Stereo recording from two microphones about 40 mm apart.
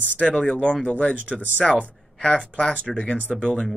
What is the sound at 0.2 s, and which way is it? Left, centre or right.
Speech, left.